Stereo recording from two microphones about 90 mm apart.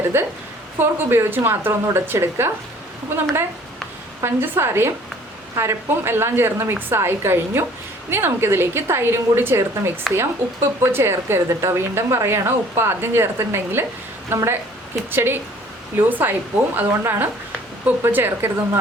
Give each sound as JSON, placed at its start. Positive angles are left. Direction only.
{"t": 0.1, "sound": "a woman's voice", "side_deg": -25}
{"t": 4.2, "sound": "a woman's voice", "side_deg": -25}